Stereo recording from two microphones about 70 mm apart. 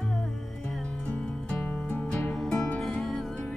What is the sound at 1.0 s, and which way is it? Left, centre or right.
Music, centre.